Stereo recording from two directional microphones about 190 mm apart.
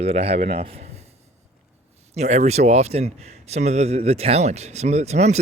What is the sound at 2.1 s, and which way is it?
A man's voice, 35° right (ahead or behind).